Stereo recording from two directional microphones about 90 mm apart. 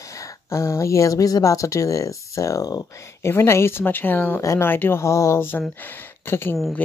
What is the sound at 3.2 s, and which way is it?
Speech, 30° left (ahead or behind).